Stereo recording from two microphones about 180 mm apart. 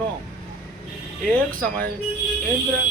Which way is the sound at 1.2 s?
10° left (ahead or behind).